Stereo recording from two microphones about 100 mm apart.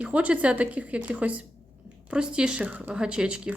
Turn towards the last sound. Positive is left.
turn(degrees=-10)  # may be behind; listen again after turning